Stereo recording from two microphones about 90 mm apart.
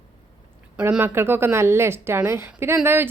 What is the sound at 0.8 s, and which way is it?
A woman's voice, 15° right (ahead or behind).